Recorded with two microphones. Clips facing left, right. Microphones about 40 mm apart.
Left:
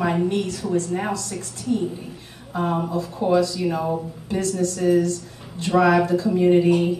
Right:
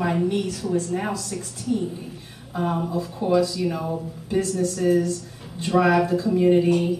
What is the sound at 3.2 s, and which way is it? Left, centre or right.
Speech, left.